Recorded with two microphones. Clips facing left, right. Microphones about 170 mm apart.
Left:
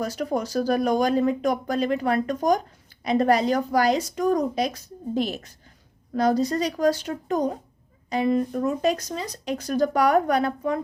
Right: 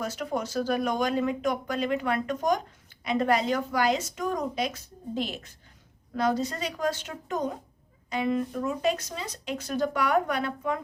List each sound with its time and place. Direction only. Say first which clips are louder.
0.0 s speech: left 4 dB; 40° left (ahead or behind)